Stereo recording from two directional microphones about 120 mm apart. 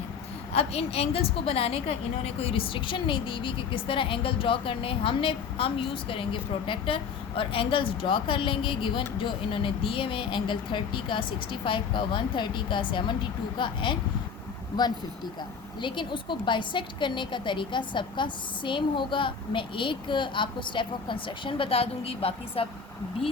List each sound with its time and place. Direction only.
0.5 s a woman's voice: 55° left (ahead or behind)
15.8 s a woman's voice: 40° left (ahead or behind)